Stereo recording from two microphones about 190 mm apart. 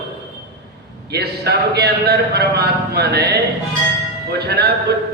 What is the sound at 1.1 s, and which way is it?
A man's voice, 60° right (ahead or behind).